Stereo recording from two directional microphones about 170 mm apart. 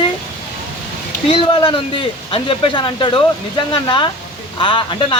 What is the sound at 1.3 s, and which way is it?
Speech, 30° left (ahead or behind).